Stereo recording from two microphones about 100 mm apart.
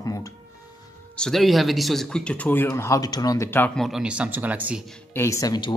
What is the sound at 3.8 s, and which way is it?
Speech, 5° right (ahead or behind).